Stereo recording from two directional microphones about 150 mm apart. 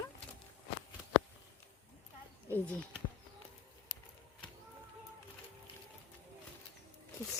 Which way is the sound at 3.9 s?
30° left (ahead or behind).